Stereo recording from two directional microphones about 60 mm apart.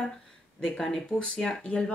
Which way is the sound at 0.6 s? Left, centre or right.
Centre.